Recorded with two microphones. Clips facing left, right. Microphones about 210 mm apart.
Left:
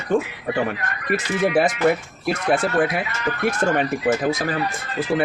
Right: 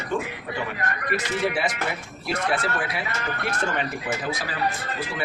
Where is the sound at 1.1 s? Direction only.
50° left (ahead or behind).